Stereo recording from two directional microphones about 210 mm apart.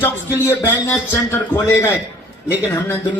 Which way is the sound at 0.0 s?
10° left (ahead or behind).